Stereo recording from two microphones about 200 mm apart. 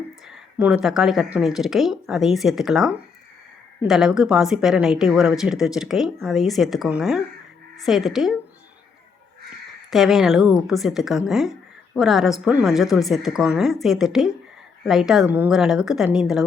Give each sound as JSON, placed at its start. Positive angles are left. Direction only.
{"t": 0.3, "sound": "speech", "side_deg": 0}
{"t": 9.9, "sound": "speech", "side_deg": 0}